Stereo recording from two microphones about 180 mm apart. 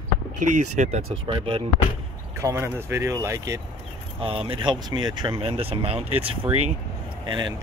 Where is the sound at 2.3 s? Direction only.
15° right (ahead or behind).